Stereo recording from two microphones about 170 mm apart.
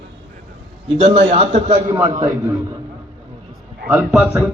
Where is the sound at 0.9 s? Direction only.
40° right (ahead or behind).